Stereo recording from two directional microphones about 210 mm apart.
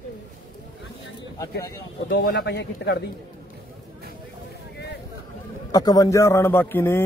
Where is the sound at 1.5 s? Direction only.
55° left (ahead or behind).